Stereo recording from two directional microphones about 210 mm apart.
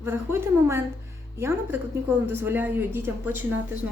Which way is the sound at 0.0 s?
10° right (ahead or behind).